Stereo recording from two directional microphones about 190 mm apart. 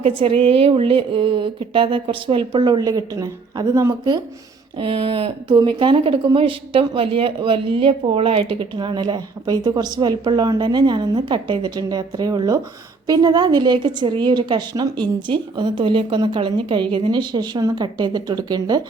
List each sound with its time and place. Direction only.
0.0 s speech: 30° right (ahead or behind)